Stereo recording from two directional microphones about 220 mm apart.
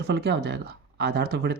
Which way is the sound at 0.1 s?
45° right (ahead or behind).